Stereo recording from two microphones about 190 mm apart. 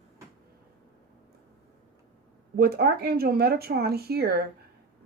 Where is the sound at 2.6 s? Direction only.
55° right (ahead or behind).